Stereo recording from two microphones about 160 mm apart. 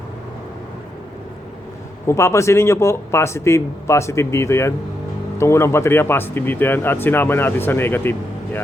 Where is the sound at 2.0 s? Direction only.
15° left (ahead or behind).